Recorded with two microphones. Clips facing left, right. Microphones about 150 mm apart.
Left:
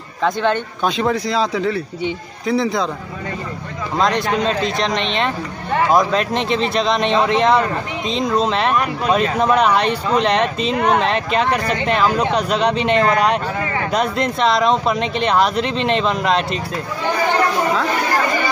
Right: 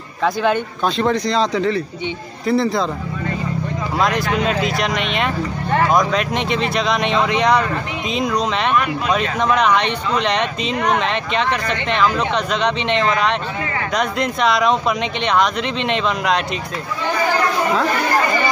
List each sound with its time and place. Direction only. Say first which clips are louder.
0.2 s speech: even; 5° right (ahead or behind)
4.6 s speech: even; 5° right (ahead or behind)
4.8 s speech: left 1 dB; 30° left (ahead or behind)
6.3 s speech: left 1 dB; centre (ahead or behind)
8.6 s speech: left 1 dB; 35° left (ahead or behind)
12.1 s speech: left 2 dB; 10° left (ahead or behind)
12.7 s speech: left 3 dB; 40° left (ahead or behind)
14.2 s speech: even; centre (ahead or behind)